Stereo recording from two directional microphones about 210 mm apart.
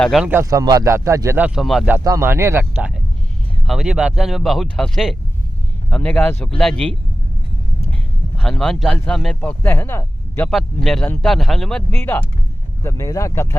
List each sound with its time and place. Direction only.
0.0 s speech: centre (ahead or behind)
8.4 s speech: 5° left (ahead or behind)